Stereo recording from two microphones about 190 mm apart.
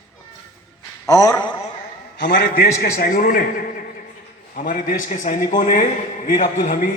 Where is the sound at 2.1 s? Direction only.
60° left (ahead or behind).